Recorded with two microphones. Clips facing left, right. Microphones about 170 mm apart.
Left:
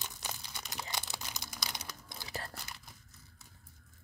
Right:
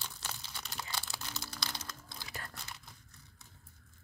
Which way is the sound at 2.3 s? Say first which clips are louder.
Left 5 dB; 35° left (ahead or behind).